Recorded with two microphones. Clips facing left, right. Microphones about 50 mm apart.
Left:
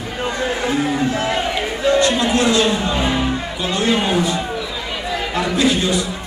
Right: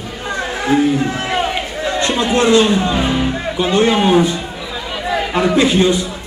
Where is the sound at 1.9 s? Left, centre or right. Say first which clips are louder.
Left 1 dB; right.